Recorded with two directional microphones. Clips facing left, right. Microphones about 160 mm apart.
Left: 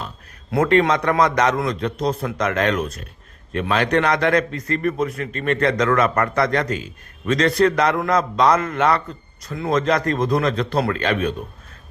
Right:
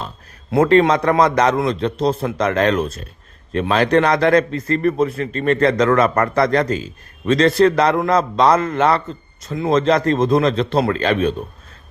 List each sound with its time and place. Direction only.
0.5 s a man's voice: 30° right (ahead or behind)